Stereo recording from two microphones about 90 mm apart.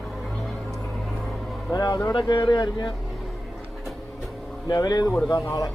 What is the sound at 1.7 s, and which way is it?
Speech, 45° left (ahead or behind).